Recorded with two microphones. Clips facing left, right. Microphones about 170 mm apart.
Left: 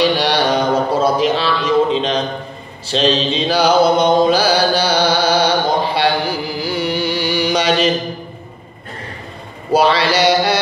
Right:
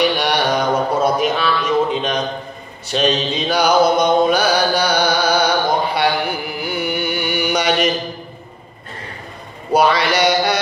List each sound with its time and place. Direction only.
0.0 s music: 30° left (ahead or behind)
2.9 s mantra: 25° left (ahead or behind)
5.8 s music: 25° left (ahead or behind)
9.7 s mantra: 25° left (ahead or behind)